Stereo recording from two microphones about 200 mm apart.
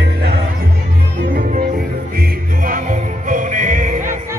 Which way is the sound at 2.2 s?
45° right (ahead or behind).